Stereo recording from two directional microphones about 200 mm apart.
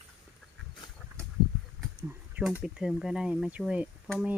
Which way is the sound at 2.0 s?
10° right (ahead or behind).